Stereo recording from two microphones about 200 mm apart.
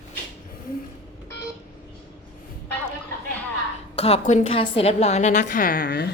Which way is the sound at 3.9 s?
30° left (ahead or behind).